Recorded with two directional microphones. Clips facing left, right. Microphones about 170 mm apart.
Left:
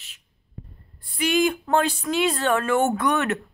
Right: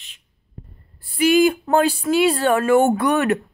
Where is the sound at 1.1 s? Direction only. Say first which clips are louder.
Right 6 dB; 5° right (ahead or behind).